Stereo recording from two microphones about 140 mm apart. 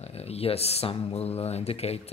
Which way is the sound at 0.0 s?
45° left (ahead or behind).